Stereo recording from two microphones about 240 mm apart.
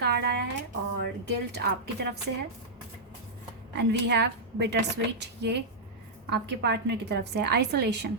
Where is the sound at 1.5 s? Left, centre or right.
Right.